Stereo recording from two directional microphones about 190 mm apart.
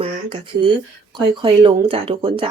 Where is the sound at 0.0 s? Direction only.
30° right (ahead or behind).